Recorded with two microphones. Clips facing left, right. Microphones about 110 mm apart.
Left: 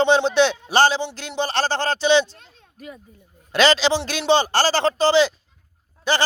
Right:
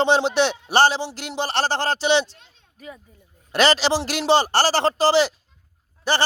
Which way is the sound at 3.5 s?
35° right (ahead or behind).